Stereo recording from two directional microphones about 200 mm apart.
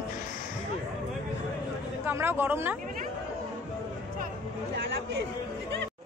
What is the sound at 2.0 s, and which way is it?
Speech, 10° right (ahead or behind).